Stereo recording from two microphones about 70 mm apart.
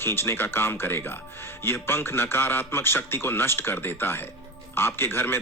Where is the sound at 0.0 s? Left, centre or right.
Left.